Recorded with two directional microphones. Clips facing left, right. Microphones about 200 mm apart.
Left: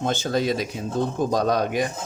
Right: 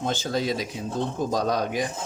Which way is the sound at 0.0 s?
50° left (ahead or behind).